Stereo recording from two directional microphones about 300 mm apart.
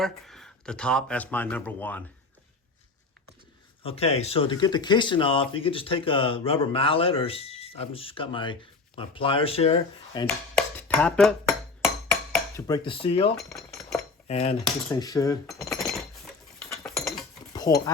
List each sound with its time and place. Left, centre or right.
0.0 s speech: centre
3.8 s speech: centre
10.8 s dishes: centre
14.3 s cutlery: left
14.8 s speech: centre
15.4 s cutlery: centre